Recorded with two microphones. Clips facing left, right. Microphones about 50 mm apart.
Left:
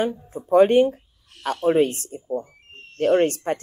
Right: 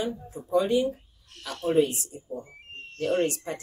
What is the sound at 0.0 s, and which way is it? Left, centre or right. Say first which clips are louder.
Speech: left 6 dB; left.